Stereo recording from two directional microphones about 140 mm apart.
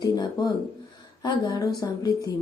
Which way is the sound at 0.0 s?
30° left (ahead or behind).